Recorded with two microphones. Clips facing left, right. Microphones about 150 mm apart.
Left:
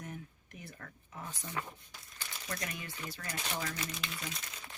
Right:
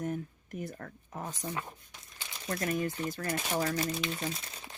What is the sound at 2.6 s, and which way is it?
Speech, 45° right (ahead or behind).